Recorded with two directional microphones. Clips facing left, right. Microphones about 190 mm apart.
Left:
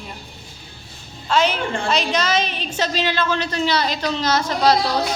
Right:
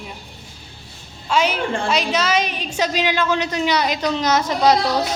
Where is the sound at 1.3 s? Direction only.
10° right (ahead or behind).